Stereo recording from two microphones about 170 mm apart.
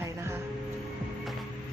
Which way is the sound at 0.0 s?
15° right (ahead or behind).